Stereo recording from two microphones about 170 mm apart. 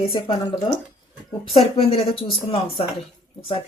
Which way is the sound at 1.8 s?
35° left (ahead or behind).